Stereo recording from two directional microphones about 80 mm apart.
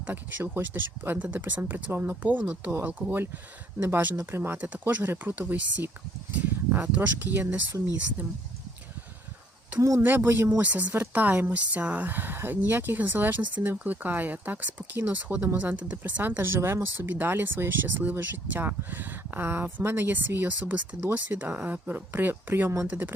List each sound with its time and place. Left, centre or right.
0.0 s speech: right
6.3 s a sound: right
6.9 s speech: right
10.0 s speech: right
10.6 s speech: centre